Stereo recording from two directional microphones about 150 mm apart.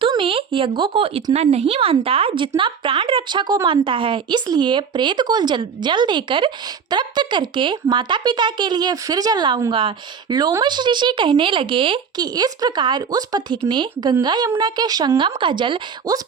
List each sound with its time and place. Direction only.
0.0 s speech: 35° right (ahead or behind)